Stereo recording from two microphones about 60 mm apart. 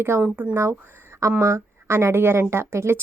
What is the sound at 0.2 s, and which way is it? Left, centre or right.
Speech, centre.